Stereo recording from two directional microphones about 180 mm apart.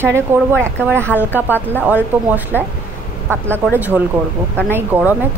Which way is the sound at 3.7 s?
10° right (ahead or behind).